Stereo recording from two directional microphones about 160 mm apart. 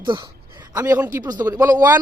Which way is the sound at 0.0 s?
30° right (ahead or behind).